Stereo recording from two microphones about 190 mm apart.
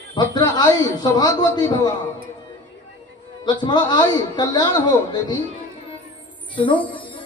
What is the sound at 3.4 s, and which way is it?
A man's voice, 25° left (ahead or behind).